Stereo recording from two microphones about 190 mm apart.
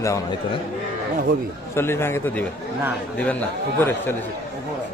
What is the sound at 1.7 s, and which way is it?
Speech, 15° left (ahead or behind).